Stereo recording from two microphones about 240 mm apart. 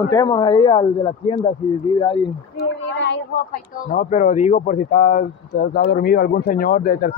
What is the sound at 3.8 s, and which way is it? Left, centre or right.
Speech, left.